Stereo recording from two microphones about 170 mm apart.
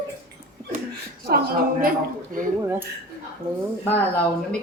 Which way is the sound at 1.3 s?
60° right (ahead or behind).